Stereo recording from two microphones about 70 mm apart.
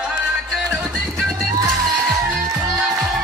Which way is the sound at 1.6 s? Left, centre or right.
Centre.